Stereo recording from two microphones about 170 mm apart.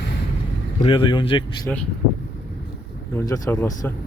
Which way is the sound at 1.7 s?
10° left (ahead or behind).